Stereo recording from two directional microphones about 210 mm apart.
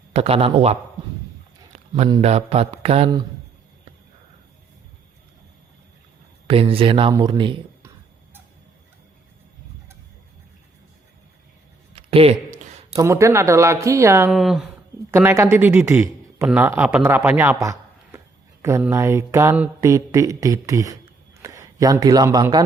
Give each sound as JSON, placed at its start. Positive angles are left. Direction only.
{"t": 0.1, "sound": "a man's voice", "side_deg": -30}
{"t": 2.0, "sound": "a man's voice", "side_deg": -25}
{"t": 6.5, "sound": "a man's voice", "side_deg": -25}
{"t": 11.9, "sound": "a sound", "side_deg": -30}
{"t": 13.0, "sound": "speech", "side_deg": -15}
{"t": 14.3, "sound": "speech", "side_deg": 0}
{"t": 18.6, "sound": "mantra", "side_deg": -15}